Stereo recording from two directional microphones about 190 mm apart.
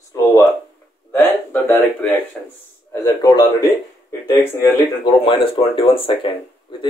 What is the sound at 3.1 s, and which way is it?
Speech, 20° left (ahead or behind).